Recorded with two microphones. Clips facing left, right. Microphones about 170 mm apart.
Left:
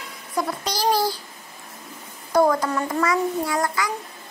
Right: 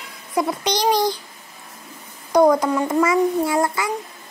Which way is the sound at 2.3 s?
15° right (ahead or behind).